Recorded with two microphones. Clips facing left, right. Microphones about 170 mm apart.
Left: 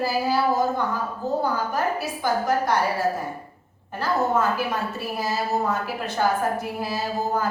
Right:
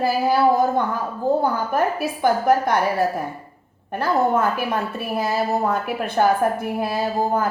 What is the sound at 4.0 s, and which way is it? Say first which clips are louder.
A woman's voice: right 3 dB; 55° right (ahead or behind).